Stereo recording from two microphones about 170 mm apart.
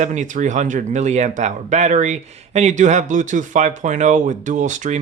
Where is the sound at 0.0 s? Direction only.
45° right (ahead or behind).